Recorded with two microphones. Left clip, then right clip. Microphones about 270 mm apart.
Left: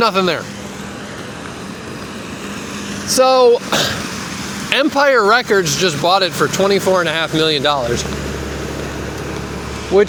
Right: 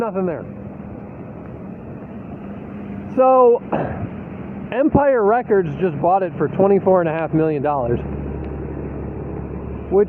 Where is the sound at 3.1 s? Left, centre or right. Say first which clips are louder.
Left 2 dB; centre.